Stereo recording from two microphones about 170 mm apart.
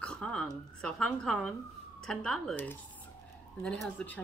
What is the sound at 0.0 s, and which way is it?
A woman's voice, 5° left (ahead or behind).